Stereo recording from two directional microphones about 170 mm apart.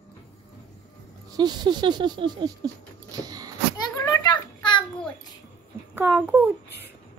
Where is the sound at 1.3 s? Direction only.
25° right (ahead or behind).